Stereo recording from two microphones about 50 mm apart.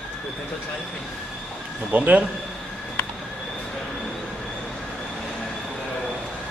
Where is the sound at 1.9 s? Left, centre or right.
Right.